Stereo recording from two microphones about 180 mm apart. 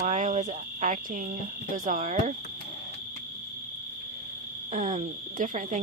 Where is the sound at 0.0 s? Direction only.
40° right (ahead or behind).